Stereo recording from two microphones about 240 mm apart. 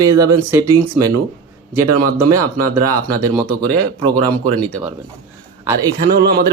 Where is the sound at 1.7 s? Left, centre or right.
Right.